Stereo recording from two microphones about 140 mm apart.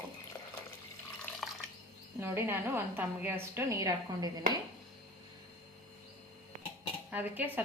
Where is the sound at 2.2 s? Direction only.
15° right (ahead or behind).